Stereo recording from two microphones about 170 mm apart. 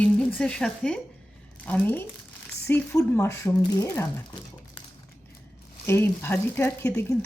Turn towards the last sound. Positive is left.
turn(degrees=15)  # may be behind; listen again after turning